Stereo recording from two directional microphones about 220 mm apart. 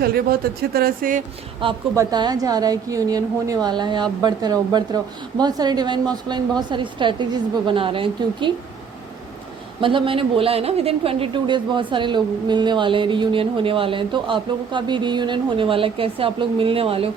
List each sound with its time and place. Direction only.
0.0 s speech: 45° right (ahead or behind)
1.6 s a woman's voice: 20° right (ahead or behind)
9.8 s a woman's voice: 25° right (ahead or behind)